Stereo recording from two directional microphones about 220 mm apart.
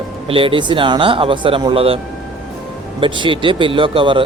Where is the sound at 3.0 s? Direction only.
20° right (ahead or behind).